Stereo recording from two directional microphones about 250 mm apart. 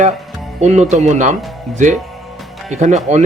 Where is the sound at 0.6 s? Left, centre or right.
Right.